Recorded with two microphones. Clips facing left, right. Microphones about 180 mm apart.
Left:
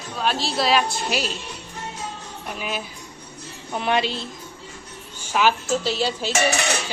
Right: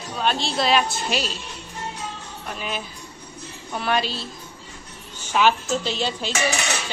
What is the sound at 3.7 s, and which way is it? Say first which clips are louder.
Speech: left 2 dB; 20° left (ahead or behind).